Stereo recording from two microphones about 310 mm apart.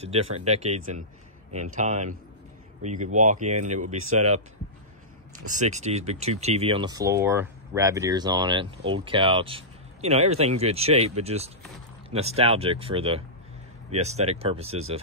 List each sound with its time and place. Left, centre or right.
0.0 s speech: centre
5.5 s speech: right